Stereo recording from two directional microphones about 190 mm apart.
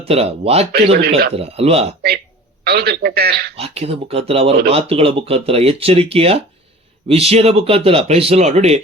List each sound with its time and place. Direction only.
0.0 s speech: 30° right (ahead or behind)
0.9 s a man's voice: 55° right (ahead or behind)
1.4 s speech: 30° right (ahead or behind)
2.6 s a man's voice: 55° right (ahead or behind)
3.5 s speech: 30° right (ahead or behind)